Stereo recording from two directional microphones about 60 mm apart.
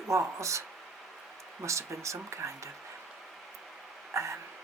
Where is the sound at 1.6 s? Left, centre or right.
Right.